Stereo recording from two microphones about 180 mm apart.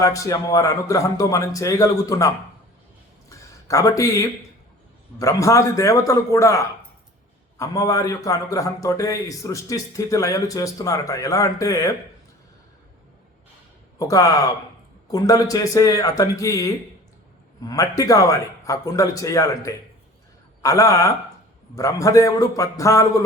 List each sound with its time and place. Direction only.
0.0 s a man's voice: 20° left (ahead or behind)
3.2 s a sound: 15° left (ahead or behind)
5.2 s a man's voice: 15° left (ahead or behind)
14.1 s a man's voice: 20° left (ahead or behind)